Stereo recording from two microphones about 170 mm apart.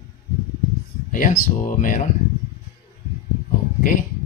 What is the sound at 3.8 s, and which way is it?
Speech, 50° left (ahead or behind).